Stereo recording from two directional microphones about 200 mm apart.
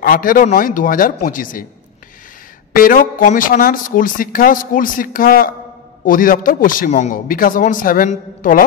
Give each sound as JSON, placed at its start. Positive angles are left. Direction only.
{"t": 0.0, "sound": "speech", "side_deg": 45}
{"t": 2.7, "sound": "speech", "side_deg": 45}